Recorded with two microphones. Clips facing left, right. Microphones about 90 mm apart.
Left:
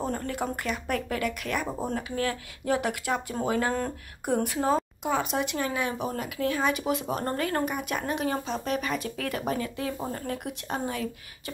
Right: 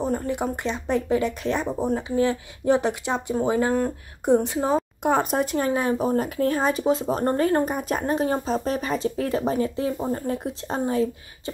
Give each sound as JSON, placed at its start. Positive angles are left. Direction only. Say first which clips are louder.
{"t": 0.0, "sound": "speech", "louder": "right 5 dB", "side_deg": -20}
{"t": 5.0, "sound": "speech", "louder": "right 6 dB", "side_deg": -45}